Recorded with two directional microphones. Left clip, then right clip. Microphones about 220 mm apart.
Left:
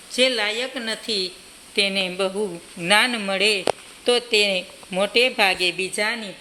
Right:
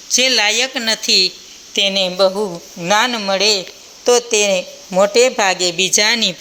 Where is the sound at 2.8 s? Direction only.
10° right (ahead or behind).